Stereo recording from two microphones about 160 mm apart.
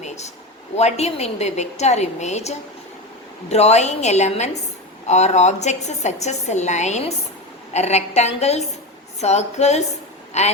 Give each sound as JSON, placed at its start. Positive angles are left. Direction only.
{"t": 0.8, "sound": "a woman's voice", "side_deg": 40}